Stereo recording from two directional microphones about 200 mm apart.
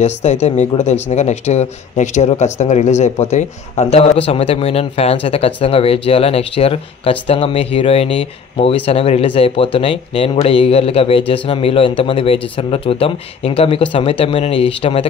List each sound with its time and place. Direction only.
0.0 s speech: 35° left (ahead or behind)